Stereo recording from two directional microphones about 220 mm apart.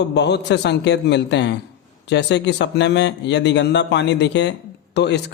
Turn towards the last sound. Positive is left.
turn(degrees=50)  # may be behind; listen again after turning